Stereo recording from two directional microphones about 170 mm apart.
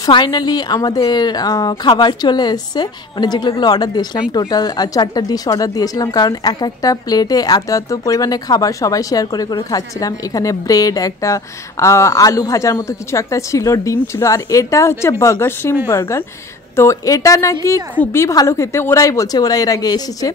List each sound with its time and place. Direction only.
0.0 s a woman's voice: 25° left (ahead or behind)